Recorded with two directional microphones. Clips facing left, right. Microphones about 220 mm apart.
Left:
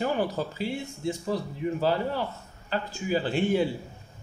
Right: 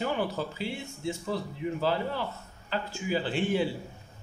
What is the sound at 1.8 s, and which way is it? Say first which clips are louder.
Speech: left 3 dB; 45° left (ahead or behind).